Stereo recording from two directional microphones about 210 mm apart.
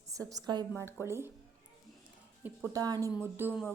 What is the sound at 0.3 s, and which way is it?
A woman's voice, 20° right (ahead or behind).